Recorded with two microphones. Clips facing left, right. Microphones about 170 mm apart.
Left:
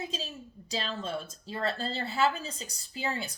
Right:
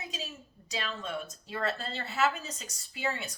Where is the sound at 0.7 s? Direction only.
30° left (ahead or behind).